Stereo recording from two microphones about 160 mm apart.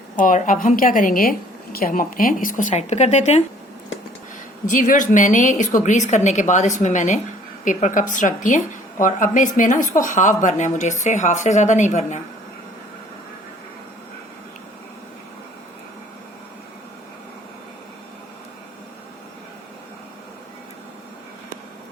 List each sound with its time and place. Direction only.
0.2 s a woman's voice: 55° left (ahead or behind)
4.6 s speech: 55° left (ahead or behind)